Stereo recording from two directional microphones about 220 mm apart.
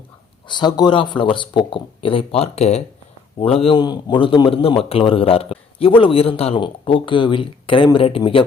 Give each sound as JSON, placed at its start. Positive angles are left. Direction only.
{"t": 0.4, "sound": "a man's voice", "side_deg": 20}